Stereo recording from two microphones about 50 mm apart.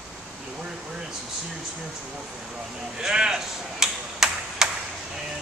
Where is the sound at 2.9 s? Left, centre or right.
Centre.